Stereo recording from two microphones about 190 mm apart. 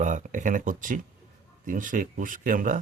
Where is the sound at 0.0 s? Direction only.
40° right (ahead or behind).